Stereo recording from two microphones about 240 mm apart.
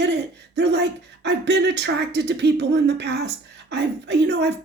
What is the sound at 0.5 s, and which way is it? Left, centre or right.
A woman's voice, right.